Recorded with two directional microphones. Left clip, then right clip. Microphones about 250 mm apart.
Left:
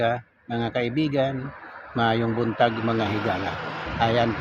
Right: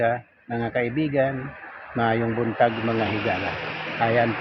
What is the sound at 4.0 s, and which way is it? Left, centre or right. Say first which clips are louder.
Speech: right 1 dB; centre.